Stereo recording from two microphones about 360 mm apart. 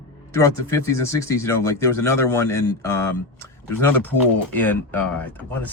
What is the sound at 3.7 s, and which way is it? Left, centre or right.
Speech, centre.